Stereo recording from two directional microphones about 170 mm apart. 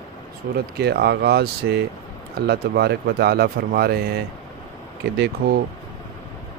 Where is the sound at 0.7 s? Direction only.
75° right (ahead or behind).